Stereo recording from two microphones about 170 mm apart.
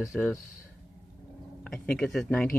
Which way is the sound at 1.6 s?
5° left (ahead or behind).